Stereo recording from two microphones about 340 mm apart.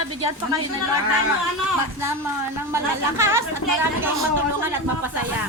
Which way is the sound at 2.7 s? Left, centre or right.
Centre.